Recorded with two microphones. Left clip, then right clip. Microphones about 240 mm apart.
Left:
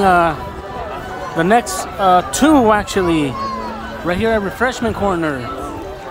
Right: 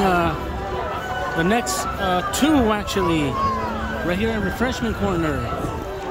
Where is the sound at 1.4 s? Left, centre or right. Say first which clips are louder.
Left 8 dB; centre.